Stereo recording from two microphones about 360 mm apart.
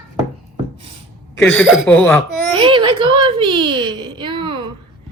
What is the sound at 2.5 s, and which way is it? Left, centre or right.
A child's voice, centre.